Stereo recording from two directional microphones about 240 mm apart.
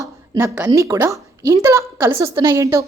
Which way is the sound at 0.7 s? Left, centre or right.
Centre.